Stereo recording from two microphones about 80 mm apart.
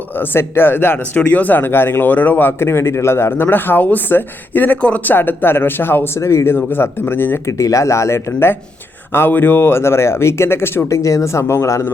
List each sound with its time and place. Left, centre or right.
0.2 s speech: left
7.6 s speech: left